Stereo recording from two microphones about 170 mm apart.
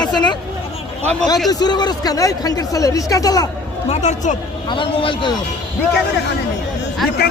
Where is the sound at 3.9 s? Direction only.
45° left (ahead or behind).